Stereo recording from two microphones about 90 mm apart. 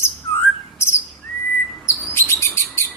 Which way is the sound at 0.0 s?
30° left (ahead or behind).